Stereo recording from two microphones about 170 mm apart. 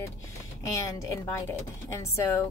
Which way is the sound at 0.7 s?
15° left (ahead or behind).